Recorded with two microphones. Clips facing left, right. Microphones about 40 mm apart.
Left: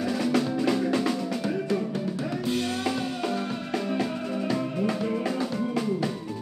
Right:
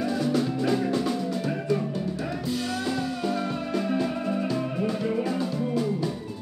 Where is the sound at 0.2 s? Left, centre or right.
Left.